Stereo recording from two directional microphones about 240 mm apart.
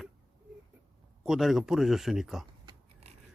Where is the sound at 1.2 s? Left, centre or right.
Centre.